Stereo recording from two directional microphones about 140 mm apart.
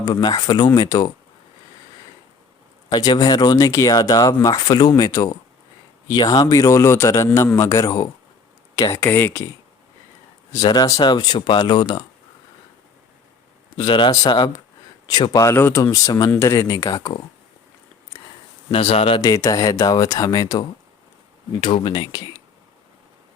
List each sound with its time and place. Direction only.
0.0 s speech: 30° left (ahead or behind)
2.9 s speech: 30° left (ahead or behind)
10.5 s speech: 30° left (ahead or behind)
13.7 s speech: 35° left (ahead or behind)
18.7 s speech: 45° left (ahead or behind)
19.2 s speech: 25° left (ahead or behind)